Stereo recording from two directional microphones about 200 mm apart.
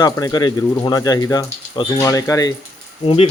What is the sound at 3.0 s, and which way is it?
Speech, 30° left (ahead or behind).